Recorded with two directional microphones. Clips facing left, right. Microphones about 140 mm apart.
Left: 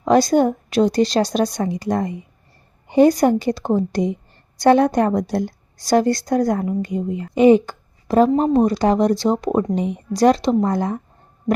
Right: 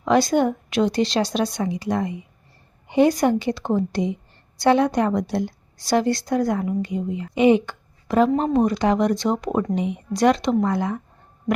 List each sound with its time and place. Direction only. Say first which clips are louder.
0.0 s a woman's voice: left 3 dB; 40° left (ahead or behind)